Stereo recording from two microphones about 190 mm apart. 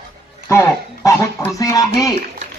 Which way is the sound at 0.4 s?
15° left (ahead or behind).